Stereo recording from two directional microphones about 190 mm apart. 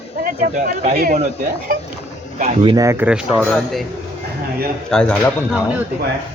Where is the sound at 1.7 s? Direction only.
50° right (ahead or behind).